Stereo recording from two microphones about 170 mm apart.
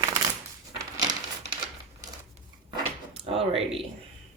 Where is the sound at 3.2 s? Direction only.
35° right (ahead or behind).